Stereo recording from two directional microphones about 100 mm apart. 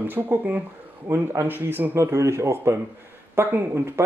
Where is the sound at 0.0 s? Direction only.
20° right (ahead or behind).